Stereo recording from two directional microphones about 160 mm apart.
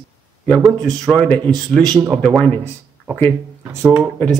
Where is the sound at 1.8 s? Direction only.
25° right (ahead or behind).